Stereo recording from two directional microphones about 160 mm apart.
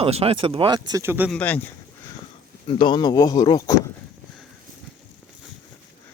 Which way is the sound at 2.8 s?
30° left (ahead or behind).